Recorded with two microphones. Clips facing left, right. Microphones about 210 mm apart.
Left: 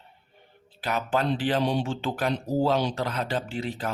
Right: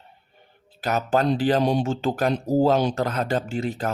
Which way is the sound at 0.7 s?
40° right (ahead or behind).